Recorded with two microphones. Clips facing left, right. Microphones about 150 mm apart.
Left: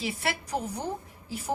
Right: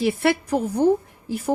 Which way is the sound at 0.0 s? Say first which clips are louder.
Right 12 dB; 60° right (ahead or behind).